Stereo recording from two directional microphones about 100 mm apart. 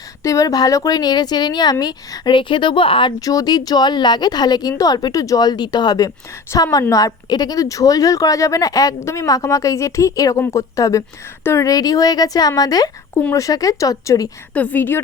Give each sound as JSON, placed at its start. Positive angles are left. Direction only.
{"t": 0.2, "sound": "speech", "side_deg": 35}
{"t": 3.2, "sound": "speech", "side_deg": 35}
{"t": 14.5, "sound": "a woman's voice", "side_deg": 15}